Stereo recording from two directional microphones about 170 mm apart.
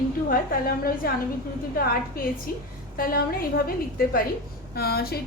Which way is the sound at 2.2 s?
60° left (ahead or behind).